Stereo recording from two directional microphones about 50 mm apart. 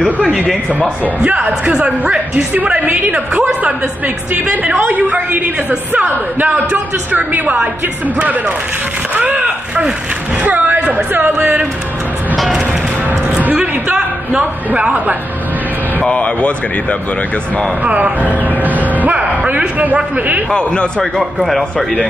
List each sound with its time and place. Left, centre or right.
0.2 s a woman's voice: right
2.5 s a woman's voice: right
6.0 s a woman's voice: right; by 11.6 s centre
13.6 s a man's voice: centre
16.0 s speech: left
17.8 s speech: right
20.5 s speech: centre
21.0 s a man's voice: centre